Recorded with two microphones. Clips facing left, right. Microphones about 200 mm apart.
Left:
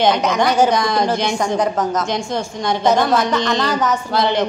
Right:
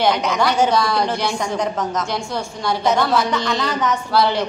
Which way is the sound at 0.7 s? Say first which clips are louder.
Left 1 dB; 20° left (ahead or behind).